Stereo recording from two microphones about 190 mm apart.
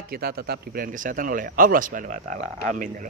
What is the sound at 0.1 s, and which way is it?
Speech, 55° right (ahead or behind).